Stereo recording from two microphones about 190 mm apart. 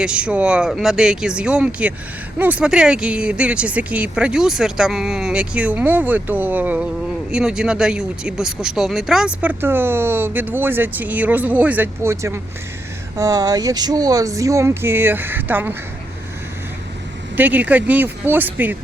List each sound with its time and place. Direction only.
0.0 s speech: 5° right (ahead or behind)
17.3 s speech: 10° right (ahead or behind)